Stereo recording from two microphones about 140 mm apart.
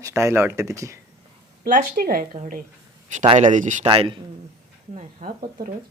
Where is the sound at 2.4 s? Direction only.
75° right (ahead or behind).